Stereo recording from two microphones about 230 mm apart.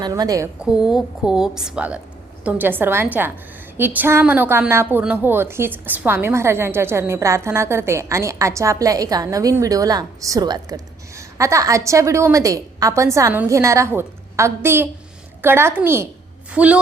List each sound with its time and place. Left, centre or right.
0.0 s a woman's voice: centre
0.6 s a woman's voice: centre